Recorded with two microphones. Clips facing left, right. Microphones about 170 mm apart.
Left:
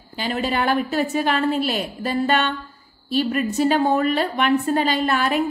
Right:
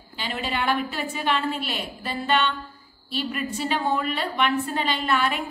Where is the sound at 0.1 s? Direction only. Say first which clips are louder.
Left 6 dB; 40° left (ahead or behind).